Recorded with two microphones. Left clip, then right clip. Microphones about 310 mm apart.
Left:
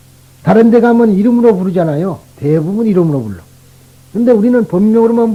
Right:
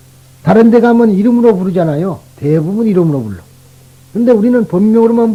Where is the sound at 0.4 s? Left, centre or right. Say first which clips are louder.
Even; left.